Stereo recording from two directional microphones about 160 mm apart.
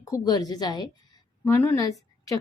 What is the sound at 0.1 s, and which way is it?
Speech, 25° left (ahead or behind).